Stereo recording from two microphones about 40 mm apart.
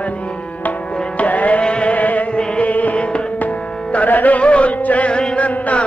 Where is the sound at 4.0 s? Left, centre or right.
Left.